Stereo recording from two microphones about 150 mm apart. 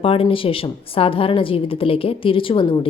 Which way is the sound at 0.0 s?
40° left (ahead or behind).